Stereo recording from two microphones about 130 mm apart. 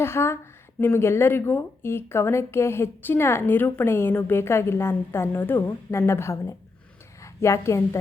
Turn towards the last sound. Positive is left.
turn(degrees=20)  # may be behind; listen again after turning